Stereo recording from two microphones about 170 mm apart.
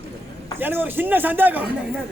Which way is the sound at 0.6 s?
10° right (ahead or behind).